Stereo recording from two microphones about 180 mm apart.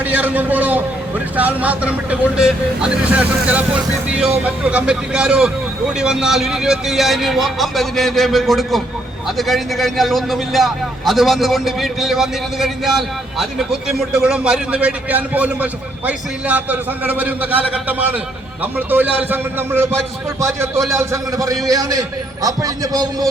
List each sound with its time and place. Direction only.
0.0 s a man's voice: 10° right (ahead or behind)
4.7 s a man's voice: 5° right (ahead or behind); by 23.3 s 20° right (ahead or behind)